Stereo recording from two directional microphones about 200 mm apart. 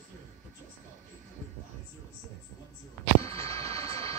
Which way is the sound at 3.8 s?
15° left (ahead or behind).